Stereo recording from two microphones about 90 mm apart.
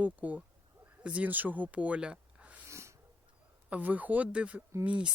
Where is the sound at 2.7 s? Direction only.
30° right (ahead or behind).